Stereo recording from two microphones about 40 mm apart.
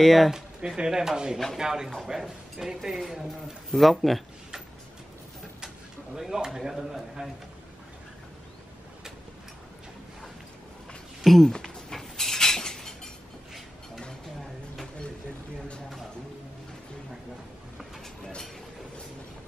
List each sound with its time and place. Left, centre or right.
0.0 s speech: centre
0.6 s speech: centre
6.1 s speech: centre
11.2 s speech: centre
11.5 s a sound: centre